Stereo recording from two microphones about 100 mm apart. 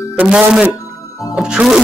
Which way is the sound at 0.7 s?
35° left (ahead or behind).